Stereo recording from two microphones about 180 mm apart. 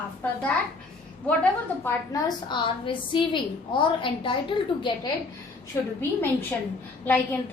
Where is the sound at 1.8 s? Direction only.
20° left (ahead or behind).